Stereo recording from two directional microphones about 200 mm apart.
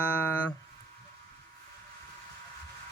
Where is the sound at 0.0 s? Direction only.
5° left (ahead or behind).